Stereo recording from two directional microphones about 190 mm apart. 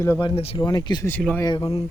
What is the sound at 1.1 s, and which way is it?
Speech, 10° left (ahead or behind).